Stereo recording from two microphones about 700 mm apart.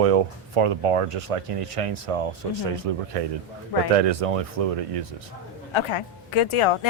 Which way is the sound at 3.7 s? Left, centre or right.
Left.